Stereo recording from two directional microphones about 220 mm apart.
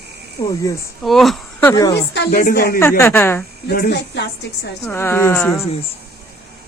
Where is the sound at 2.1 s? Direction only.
45° left (ahead or behind).